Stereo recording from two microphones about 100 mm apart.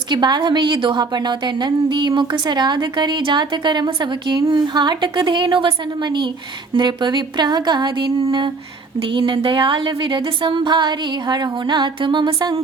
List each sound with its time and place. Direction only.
0.1 s a woman's voice: 45° right (ahead or behind)
9.1 s a woman's voice: 55° right (ahead or behind)